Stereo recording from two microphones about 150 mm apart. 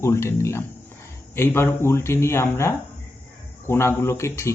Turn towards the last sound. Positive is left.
turn(degrees=20)  # may be behind; listen again after turning